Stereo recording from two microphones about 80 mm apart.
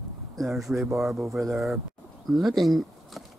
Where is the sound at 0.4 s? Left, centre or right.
Centre.